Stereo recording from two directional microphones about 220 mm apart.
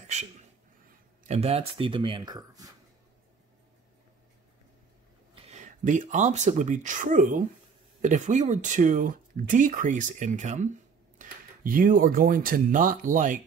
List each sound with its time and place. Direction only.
0.0 s a sound: 30° right (ahead or behind)
1.2 s speech: 30° right (ahead or behind)
5.3 s speech: 30° right (ahead or behind)